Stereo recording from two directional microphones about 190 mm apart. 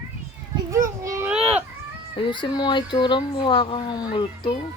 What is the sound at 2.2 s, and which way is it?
Speech, 25° left (ahead or behind).